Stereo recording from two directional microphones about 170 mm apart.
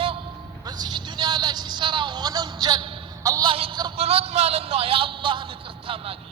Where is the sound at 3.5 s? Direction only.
30° right (ahead or behind).